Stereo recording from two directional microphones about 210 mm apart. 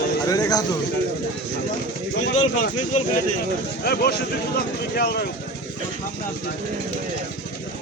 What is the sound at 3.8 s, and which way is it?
Speech, 50° left (ahead or behind).